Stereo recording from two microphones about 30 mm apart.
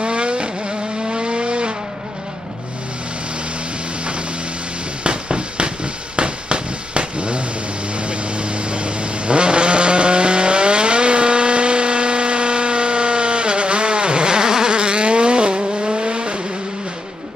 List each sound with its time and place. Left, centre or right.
0.0 s vehicle: right
5.0 s a sound: right
7.9 s vehicle: right